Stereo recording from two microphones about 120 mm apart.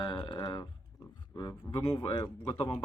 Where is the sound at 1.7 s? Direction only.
25° left (ahead or behind).